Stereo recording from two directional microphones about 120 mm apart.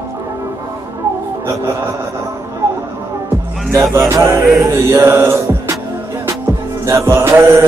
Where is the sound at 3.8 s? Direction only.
20° right (ahead or behind).